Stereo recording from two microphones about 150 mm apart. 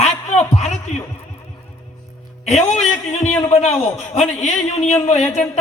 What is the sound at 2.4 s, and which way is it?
A man's voice, 50° left (ahead or behind).